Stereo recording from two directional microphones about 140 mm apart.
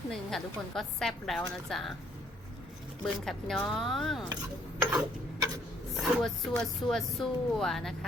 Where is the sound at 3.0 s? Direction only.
5° left (ahead or behind).